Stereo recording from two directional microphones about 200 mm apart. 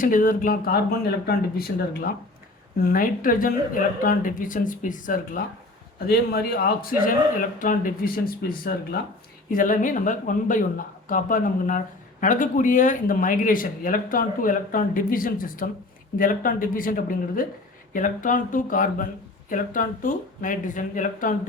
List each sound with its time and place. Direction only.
0.0 s speech: 40° left (ahead or behind)
2.8 s speech: 45° left (ahead or behind)